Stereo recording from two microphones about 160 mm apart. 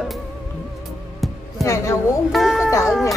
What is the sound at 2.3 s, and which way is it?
Speech, centre (ahead or behind).